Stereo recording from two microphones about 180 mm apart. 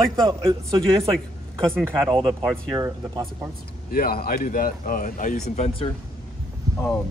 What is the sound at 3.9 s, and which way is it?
Speech, 55° left (ahead or behind).